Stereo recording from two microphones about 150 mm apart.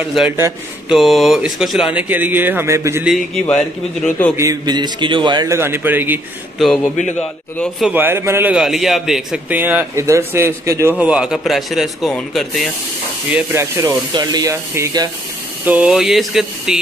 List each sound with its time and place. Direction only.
0.8 s speech: centre (ahead or behind); by 3.1 s 20° right (ahead or behind)
3.4 s a man's voice: 10° left (ahead or behind)
4.4 s a man's voice: 25° right (ahead or behind)
7.2 s a man's voice: 10° left (ahead or behind)
7.8 s speech: 15° right (ahead or behind)
8.5 s a man's voice: centre (ahead or behind)
13.3 s a man's voice: 15° right (ahead or behind)
15.6 s a man's voice: 10° right (ahead or behind)